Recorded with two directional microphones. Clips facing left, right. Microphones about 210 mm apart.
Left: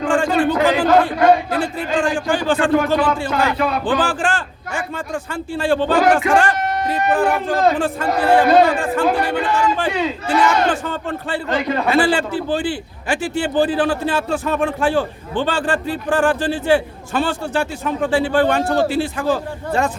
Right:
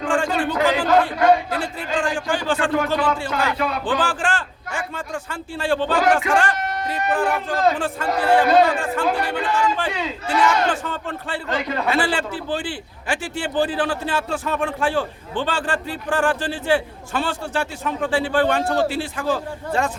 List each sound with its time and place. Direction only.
0.0 s a man's voice: 55° left (ahead or behind)
11.9 s a man's voice: 45° left (ahead or behind)